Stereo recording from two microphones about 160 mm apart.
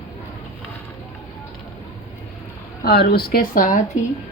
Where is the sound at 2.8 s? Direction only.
75° left (ahead or behind); by 3.8 s 60° left (ahead or behind).